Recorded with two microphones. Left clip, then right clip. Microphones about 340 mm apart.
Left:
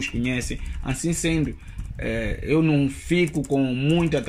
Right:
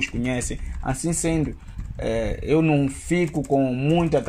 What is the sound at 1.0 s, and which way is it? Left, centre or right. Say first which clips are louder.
Speech: left 1 dB; right.